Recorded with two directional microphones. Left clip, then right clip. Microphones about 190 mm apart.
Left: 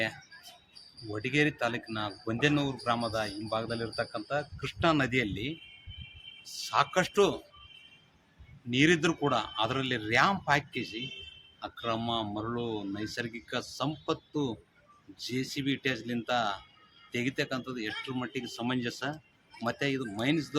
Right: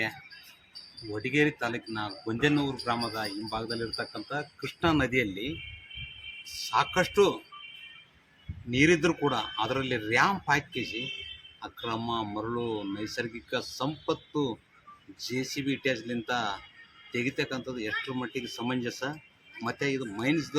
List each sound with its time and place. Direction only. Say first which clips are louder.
1.1 s speech: right 2 dB; 25° left (ahead or behind)
6.7 s speech: right 1 dB; 30° left (ahead or behind)
8.7 s speech: right 2 dB; 30° left (ahead or behind)
15.5 s speech: right 2 dB; 25° left (ahead or behind)